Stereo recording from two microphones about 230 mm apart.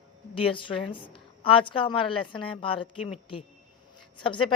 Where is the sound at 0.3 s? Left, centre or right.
Left.